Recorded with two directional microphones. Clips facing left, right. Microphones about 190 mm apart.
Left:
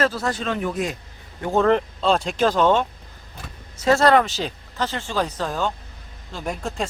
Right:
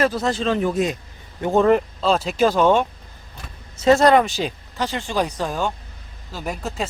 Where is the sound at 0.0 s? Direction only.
20° right (ahead or behind).